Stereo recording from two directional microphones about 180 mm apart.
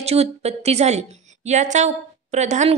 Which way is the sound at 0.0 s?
35° right (ahead or behind).